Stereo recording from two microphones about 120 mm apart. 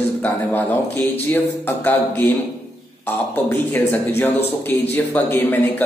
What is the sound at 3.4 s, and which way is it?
A man's voice, 20° left (ahead or behind).